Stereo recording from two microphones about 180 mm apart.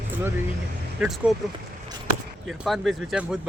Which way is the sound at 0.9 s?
5° right (ahead or behind).